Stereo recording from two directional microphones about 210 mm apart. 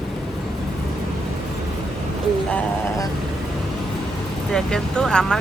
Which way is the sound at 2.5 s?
15° left (ahead or behind).